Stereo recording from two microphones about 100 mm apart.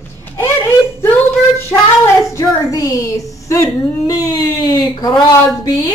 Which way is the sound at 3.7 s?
Centre (ahead or behind).